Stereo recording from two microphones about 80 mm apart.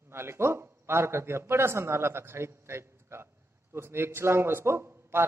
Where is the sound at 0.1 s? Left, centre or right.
Right.